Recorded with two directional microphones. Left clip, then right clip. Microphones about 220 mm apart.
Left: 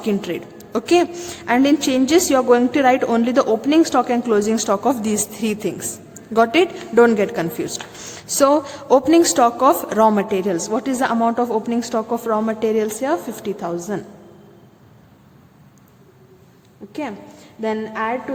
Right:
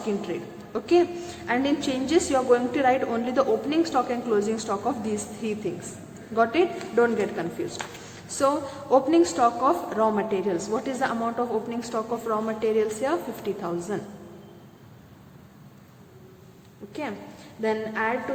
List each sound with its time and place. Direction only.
0.0 s a woman's voice: 55° left (ahead or behind)
16.9 s a woman's voice: 40° left (ahead or behind)